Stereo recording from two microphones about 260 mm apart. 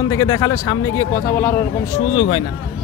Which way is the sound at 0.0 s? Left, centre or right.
Centre.